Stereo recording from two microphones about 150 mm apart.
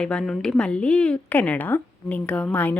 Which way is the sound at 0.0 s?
5° left (ahead or behind).